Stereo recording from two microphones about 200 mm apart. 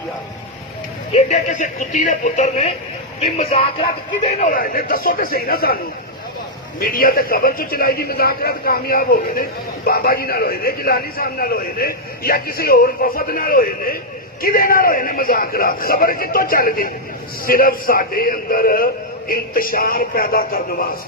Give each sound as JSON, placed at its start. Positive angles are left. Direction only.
{"t": 1.1, "sound": "a man's voice", "side_deg": 35}